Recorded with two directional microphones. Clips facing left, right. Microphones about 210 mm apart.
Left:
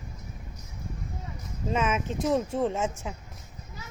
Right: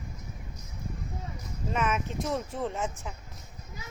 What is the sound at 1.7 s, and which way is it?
Speech, 25° left (ahead or behind).